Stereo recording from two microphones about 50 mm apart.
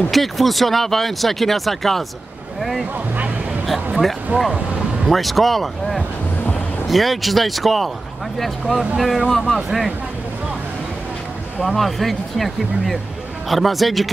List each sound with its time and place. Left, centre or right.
0.1 s speech: centre
4.3 s speech: right
5.1 s speech: centre
11.6 s speech: centre